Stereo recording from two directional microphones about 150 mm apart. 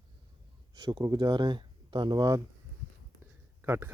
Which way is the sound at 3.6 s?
15° right (ahead or behind).